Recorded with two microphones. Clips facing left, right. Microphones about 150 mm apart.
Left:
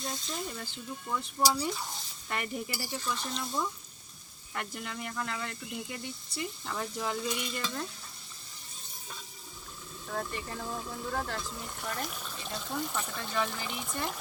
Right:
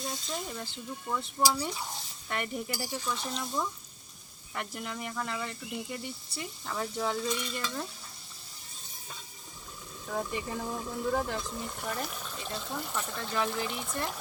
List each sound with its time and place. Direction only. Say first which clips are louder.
0.3 s speech: right 1 dB; centre (ahead or behind)
10.1 s speech: right 3 dB; 10° right (ahead or behind)
11.3 s speech: right 3 dB; 20° right (ahead or behind)
11.6 s speech: right 2 dB; 5° right (ahead or behind)